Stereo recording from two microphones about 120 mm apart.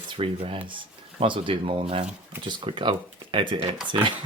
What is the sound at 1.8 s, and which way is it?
Speech, 65° right (ahead or behind).